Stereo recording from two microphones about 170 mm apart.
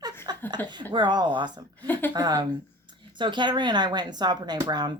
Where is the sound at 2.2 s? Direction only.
25° right (ahead or behind).